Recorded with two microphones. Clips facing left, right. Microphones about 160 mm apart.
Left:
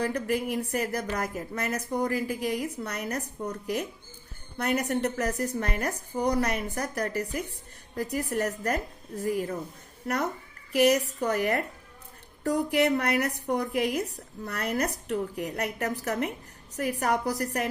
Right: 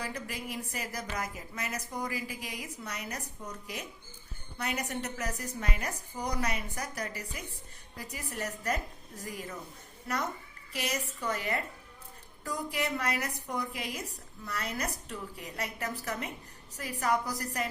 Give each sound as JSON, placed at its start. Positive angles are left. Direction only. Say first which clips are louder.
{"t": 0.0, "sound": "a woman's voice", "louder": "left 11 dB", "side_deg": 60}
{"t": 9.2, "sound": "a woman's voice", "louder": "left 12 dB", "side_deg": 40}
{"t": 10.7, "sound": "a woman's voice", "louder": "left 14 dB", "side_deg": 60}